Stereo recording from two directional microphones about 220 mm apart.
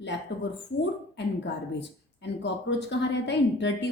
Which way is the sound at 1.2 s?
55° left (ahead or behind).